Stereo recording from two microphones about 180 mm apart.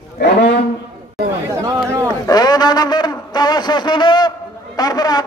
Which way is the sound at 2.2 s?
20° left (ahead or behind).